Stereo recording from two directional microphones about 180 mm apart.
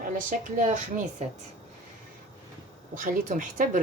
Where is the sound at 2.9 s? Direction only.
50° right (ahead or behind).